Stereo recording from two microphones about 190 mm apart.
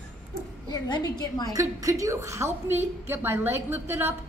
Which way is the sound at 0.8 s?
20° left (ahead or behind).